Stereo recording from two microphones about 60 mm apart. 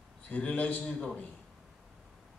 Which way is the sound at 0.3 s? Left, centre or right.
Left.